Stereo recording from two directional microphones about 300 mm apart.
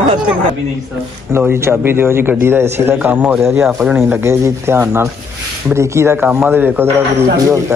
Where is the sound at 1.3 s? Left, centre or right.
Centre.